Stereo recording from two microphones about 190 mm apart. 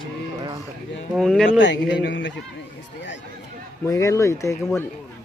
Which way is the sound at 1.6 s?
70° left (ahead or behind).